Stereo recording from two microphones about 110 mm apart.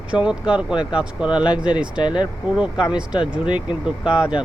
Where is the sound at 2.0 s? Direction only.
45° left (ahead or behind).